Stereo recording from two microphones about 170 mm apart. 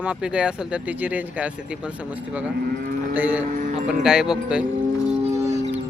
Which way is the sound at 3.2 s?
10° right (ahead or behind).